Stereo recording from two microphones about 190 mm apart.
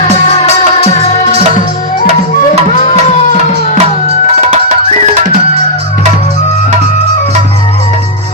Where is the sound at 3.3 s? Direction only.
35° left (ahead or behind).